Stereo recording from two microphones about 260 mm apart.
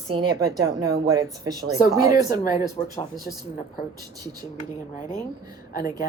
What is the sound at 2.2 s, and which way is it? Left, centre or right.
Speech, left.